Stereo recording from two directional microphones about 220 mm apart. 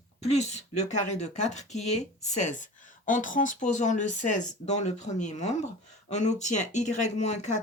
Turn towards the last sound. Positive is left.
turn(degrees=30)  # may be behind; listen again after turning